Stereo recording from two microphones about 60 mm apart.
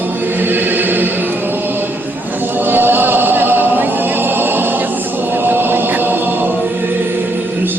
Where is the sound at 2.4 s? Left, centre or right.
Right.